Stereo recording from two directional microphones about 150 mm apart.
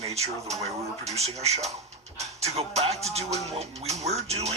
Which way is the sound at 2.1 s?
45° right (ahead or behind).